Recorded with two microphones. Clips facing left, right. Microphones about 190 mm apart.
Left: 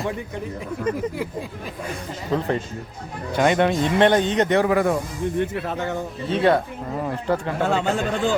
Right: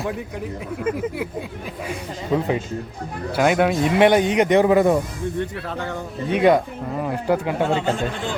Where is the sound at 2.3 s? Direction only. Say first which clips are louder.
Right 2 dB; 15° right (ahead or behind).